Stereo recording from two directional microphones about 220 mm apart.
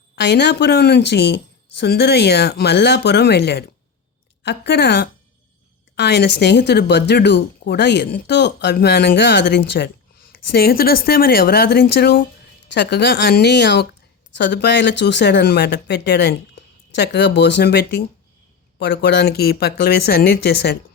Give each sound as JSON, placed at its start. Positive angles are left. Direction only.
{"t": 0.2, "sound": "speech", "side_deg": 50}